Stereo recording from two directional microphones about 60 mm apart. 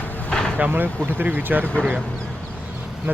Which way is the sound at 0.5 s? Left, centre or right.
Right.